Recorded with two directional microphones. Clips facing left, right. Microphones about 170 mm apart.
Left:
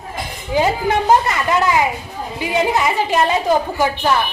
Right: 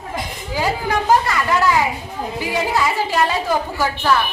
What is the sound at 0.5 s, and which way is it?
A woman's voice, 20° left (ahead or behind).